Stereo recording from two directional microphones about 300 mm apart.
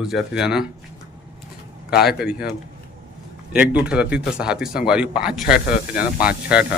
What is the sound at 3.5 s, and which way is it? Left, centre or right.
Speech, centre.